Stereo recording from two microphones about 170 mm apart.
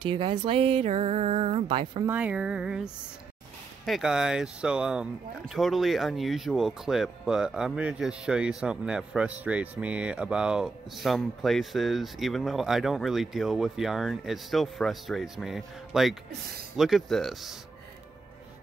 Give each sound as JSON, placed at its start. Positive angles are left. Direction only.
{"t": 0.1, "sound": "speech", "side_deg": -30}
{"t": 2.0, "sound": "a sound", "side_deg": -10}
{"t": 3.8, "sound": "speech", "side_deg": 0}